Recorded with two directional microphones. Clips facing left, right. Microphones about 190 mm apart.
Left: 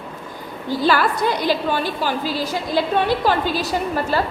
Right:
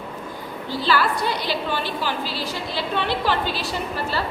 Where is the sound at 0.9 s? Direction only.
50° left (ahead or behind).